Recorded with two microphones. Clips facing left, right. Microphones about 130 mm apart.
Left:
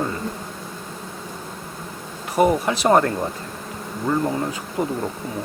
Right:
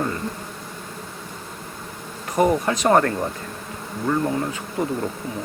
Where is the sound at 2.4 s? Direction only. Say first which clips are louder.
Left 1 dB; 10° left (ahead or behind).